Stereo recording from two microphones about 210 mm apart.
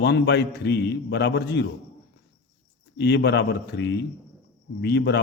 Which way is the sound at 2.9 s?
55° left (ahead or behind).